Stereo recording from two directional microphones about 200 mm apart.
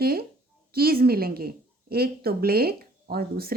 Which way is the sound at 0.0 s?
50° right (ahead or behind).